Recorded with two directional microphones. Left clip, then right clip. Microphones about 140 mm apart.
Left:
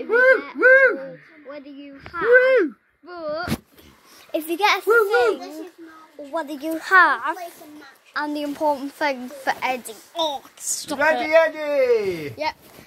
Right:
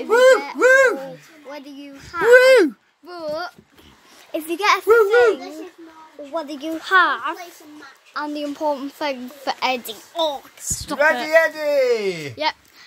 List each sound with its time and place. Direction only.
0.1 s a sound: 90° right
1.5 s a sound: 25° right (ahead or behind)
4.3 s a child's voice: centre (ahead or behind)
8.6 s a woman's voice: 15° right (ahead or behind)
10.1 s speech: 10° right (ahead or behind)
11.2 s speech: 35° left (ahead or behind)
11.8 s speech: 10° left (ahead or behind)